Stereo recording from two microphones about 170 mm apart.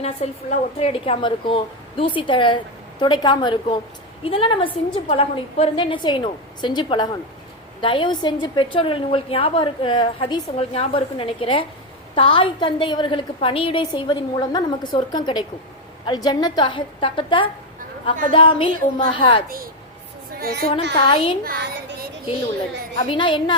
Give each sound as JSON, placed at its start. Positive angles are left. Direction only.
{"t": 0.2, "sound": "a woman's voice", "side_deg": 40}
{"t": 20.9, "sound": "a woman's voice", "side_deg": 30}
{"t": 21.4, "sound": "a sound", "side_deg": -75}
{"t": 23.0, "sound": "a woman's voice", "side_deg": 30}